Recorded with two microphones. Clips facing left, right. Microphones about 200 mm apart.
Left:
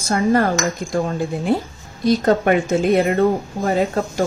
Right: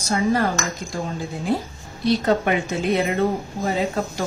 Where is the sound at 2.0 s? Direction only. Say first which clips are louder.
Left 4 dB; 45° left (ahead or behind).